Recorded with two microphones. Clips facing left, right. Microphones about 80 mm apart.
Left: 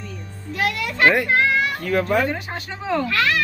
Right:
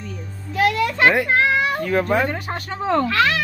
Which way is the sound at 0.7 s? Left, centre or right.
Right.